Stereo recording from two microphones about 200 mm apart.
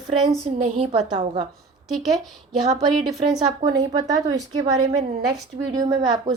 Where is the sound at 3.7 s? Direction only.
20° right (ahead or behind).